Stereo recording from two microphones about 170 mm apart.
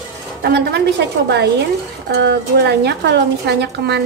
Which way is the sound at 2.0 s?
90° right.